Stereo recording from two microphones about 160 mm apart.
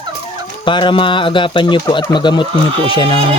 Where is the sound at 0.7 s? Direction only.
30° left (ahead or behind).